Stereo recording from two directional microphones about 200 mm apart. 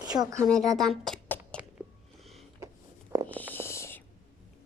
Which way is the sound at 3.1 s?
15° right (ahead or behind).